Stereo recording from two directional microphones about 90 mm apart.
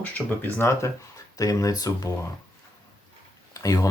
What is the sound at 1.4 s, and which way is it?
Speech, 40° left (ahead or behind).